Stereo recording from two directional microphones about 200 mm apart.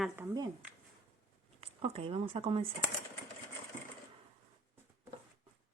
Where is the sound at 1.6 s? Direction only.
30° right (ahead or behind).